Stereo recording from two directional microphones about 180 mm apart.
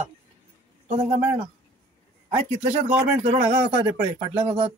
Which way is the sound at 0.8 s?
40° right (ahead or behind).